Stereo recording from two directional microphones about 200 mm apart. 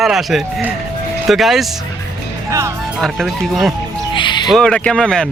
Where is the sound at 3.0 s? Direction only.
Centre (ahead or behind).